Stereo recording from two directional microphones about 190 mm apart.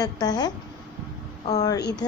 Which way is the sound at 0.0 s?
20° left (ahead or behind).